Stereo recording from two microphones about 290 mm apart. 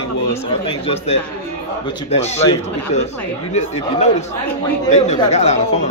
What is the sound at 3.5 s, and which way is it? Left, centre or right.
A man's voice, left.